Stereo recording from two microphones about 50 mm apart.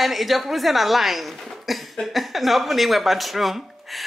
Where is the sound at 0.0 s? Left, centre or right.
Centre.